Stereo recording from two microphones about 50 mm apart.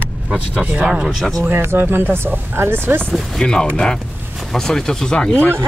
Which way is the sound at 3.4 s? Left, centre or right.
Centre.